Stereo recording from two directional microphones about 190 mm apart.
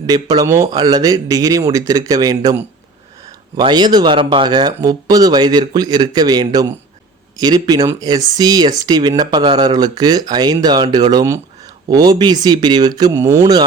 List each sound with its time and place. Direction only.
0.1 s speech: 20° right (ahead or behind)